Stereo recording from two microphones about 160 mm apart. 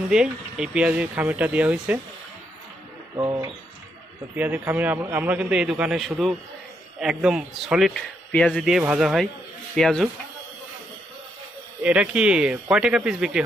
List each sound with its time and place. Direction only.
0.1 s a man's voice: 5° right (ahead or behind)
3.2 s bird: 25° right (ahead or behind)
4.4 s a man's voice: 10° right (ahead or behind)
11.8 s a man's voice: 5° right (ahead or behind)